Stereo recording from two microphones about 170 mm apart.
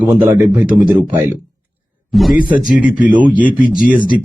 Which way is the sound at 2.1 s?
Centre (ahead or behind).